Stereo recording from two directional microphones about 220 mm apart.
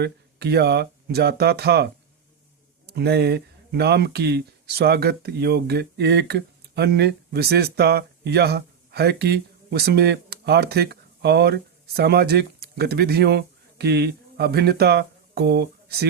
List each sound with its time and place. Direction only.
0.0 s speech: 50° right (ahead or behind)